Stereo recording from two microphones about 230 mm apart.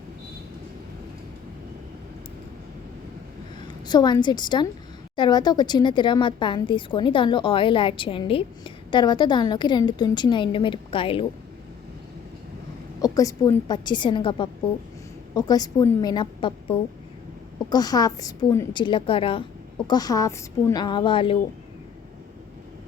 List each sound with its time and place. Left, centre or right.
3.7 s a woman's voice: centre
13.0 s a woman's voice: centre